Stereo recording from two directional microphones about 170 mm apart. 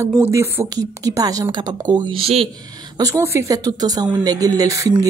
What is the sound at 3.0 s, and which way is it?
Speech, 20° right (ahead or behind).